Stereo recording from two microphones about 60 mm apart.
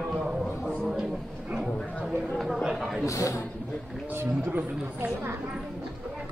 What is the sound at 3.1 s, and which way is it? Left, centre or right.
Speech, left.